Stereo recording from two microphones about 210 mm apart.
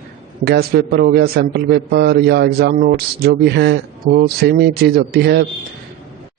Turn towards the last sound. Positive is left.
turn(degrees=-50)  # may be behind; listen again after turning